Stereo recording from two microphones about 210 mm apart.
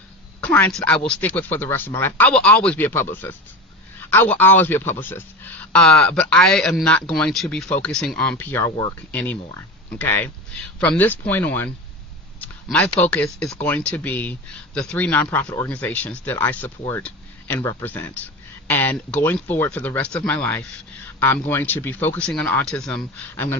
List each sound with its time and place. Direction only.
0.4 s speech: 5° left (ahead or behind)